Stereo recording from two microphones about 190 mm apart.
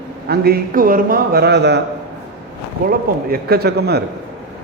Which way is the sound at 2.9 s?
55° right (ahead or behind).